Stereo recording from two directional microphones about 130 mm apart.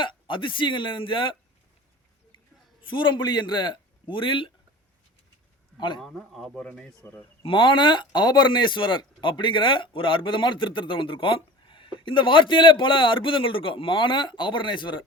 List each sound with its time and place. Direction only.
0.0 s speech: 40° left (ahead or behind)
2.8 s speech: 40° left (ahead or behind)
6.0 s speech: centre (ahead or behind)
7.4 s speech: 40° left (ahead or behind)